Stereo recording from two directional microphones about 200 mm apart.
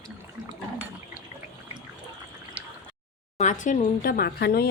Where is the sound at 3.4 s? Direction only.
40° left (ahead or behind).